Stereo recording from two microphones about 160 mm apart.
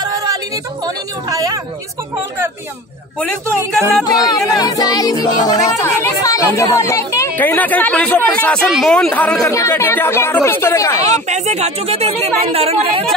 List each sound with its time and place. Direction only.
0.0 s a sound: 25° right (ahead or behind)
0.8 s speech: 20° right (ahead or behind)
4.0 s speech: 25° left (ahead or behind)
11.2 s speech: 45° right (ahead or behind)